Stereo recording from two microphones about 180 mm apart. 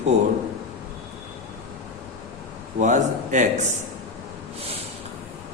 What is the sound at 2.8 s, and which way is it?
Speech, 45° right (ahead or behind).